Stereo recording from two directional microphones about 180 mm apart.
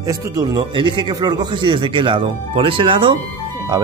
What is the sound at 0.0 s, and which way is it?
A man's voice, 20° right (ahead or behind).